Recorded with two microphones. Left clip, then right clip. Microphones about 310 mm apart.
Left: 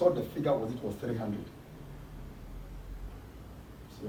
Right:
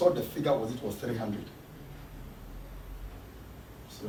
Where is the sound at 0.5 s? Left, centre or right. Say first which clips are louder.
Right 3 dB; centre.